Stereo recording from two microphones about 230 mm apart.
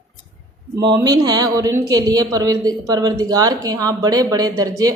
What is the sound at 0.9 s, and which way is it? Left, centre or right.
A woman's voice, centre.